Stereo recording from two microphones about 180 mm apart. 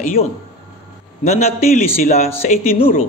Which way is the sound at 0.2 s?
35° left (ahead or behind).